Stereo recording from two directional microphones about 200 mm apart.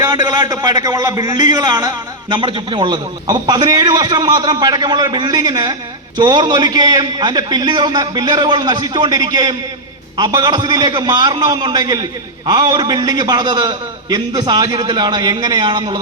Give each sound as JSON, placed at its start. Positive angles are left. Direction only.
{"t": 0.0, "sound": "a man's voice", "side_deg": -20}